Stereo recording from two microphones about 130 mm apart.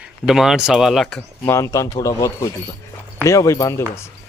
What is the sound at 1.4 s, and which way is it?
Speech, 20° left (ahead or behind).